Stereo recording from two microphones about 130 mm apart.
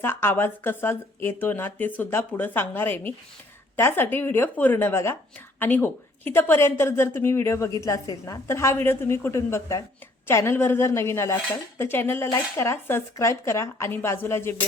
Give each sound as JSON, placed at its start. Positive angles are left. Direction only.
{"t": 0.0, "sound": "speech", "side_deg": 15}